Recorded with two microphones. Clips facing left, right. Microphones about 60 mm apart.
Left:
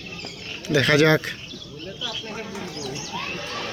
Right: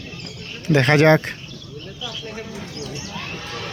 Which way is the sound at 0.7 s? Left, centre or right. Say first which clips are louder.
Right 3 dB; right.